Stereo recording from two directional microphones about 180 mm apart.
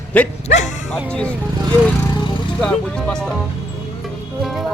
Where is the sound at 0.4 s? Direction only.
40° left (ahead or behind).